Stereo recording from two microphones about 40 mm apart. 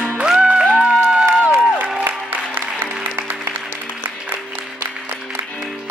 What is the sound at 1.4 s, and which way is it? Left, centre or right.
Crowd, right.